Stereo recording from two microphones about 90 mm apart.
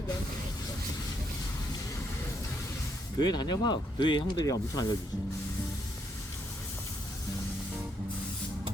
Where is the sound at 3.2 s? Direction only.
50° left (ahead or behind).